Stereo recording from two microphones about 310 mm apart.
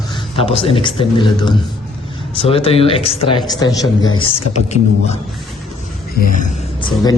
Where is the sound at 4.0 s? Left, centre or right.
Left.